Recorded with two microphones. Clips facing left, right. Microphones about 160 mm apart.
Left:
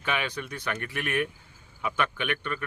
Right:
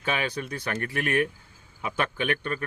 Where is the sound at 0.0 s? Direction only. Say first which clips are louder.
Right 2 dB; 35° right (ahead or behind).